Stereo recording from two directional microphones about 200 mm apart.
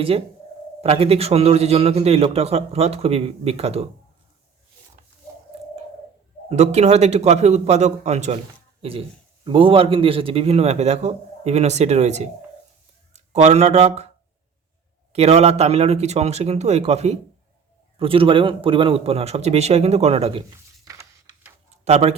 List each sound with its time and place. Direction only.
0.8 s a man's voice: 30° right (ahead or behind)
5.5 s radio: 30° right (ahead or behind)
6.5 s a man's voice: 35° right (ahead or behind)
15.1 s a man's voice: 30° right (ahead or behind)
21.8 s speech: 35° right (ahead or behind)